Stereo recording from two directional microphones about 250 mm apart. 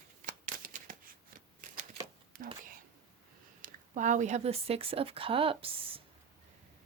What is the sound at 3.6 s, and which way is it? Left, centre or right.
Speech, right.